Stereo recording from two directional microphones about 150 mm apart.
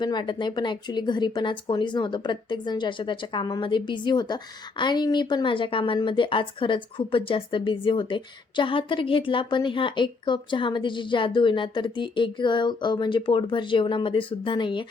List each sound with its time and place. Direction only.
0.0 s a woman's voice: 30° left (ahead or behind)